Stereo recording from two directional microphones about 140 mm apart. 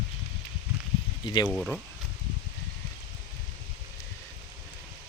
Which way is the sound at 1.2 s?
35° left (ahead or behind).